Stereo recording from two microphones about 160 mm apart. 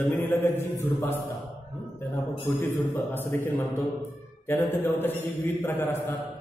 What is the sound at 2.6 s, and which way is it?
A man's voice, 15° left (ahead or behind).